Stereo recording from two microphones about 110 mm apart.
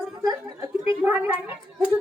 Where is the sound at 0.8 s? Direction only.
20° right (ahead or behind).